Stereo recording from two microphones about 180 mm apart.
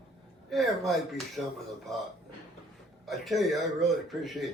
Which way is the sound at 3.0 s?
Centre (ahead or behind).